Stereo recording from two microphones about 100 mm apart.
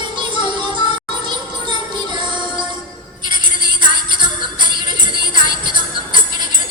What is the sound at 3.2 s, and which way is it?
Music, 50° right (ahead or behind).